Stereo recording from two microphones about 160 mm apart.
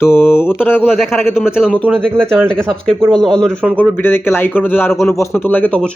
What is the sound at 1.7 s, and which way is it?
Speech, 5° left (ahead or behind).